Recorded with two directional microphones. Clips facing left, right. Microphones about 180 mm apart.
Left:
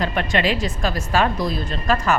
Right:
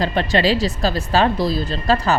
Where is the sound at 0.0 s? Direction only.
30° right (ahead or behind).